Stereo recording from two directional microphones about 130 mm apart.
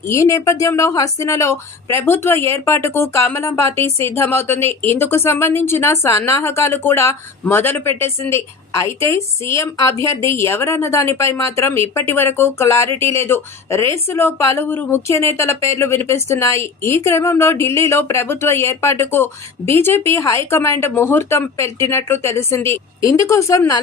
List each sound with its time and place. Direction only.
0.1 s a woman's voice: 20° left (ahead or behind)